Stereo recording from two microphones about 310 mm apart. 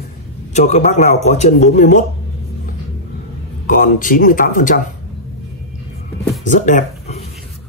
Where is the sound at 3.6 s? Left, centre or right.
Left.